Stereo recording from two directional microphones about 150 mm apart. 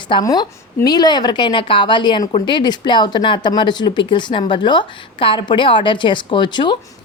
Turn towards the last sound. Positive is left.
turn(degrees=30)  # may be behind; listen again after turning